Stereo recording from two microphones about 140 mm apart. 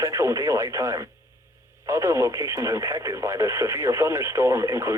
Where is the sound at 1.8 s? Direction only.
20° right (ahead or behind).